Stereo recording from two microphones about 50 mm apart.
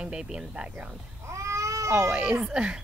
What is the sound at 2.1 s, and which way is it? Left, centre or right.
Speech, right.